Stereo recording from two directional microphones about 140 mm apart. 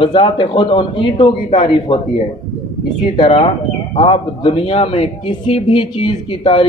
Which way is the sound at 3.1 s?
40° left (ahead or behind).